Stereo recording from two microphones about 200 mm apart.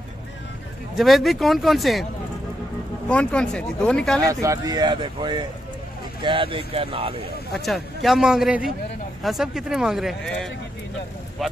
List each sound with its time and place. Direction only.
0.9 s speech: centre (ahead or behind)
3.1 s speech: 5° left (ahead or behind)
4.2 s speech: 15° right (ahead or behind)
7.5 s speech: centre (ahead or behind)